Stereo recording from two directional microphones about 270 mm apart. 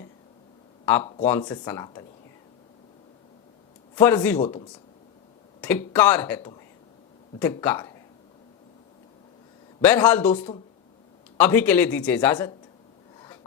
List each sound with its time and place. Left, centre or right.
1.2 s speech: centre
3.9 s speech: centre
4.4 s speech: left
5.5 s speech: centre
9.8 s speech: centre
11.3 s speech: centre